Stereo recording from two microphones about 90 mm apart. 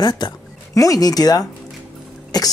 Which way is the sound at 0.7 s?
40° left (ahead or behind).